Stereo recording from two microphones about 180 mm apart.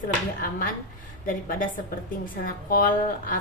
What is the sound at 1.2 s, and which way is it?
Speech, 50° left (ahead or behind).